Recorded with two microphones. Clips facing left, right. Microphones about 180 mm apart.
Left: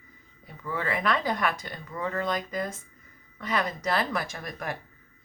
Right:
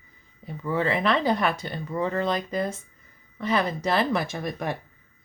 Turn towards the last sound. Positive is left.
turn(degrees=-25)  # may be behind; listen again after turning